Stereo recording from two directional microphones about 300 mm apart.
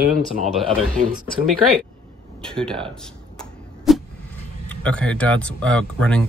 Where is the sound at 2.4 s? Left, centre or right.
Centre.